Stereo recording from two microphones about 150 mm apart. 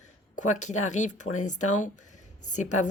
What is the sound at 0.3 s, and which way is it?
Speech, 55° left (ahead or behind).